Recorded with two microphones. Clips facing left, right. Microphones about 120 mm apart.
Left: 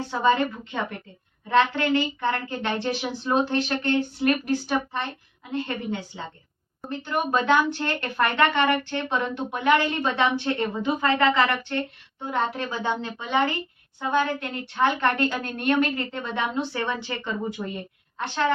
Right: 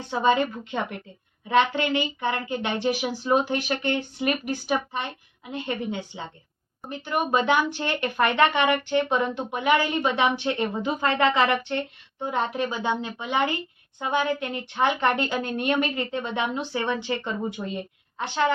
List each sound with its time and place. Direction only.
0.1 s speech: 15° right (ahead or behind)